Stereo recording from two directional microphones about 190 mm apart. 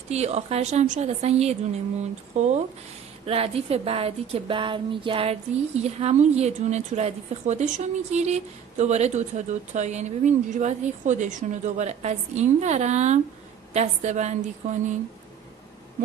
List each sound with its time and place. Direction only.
0.1 s speech: 35° right (ahead or behind)